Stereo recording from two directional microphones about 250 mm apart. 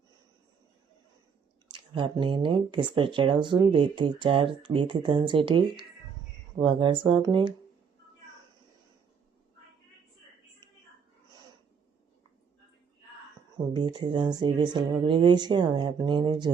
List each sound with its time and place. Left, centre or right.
1.7 s speech: centre
13.7 s speech: centre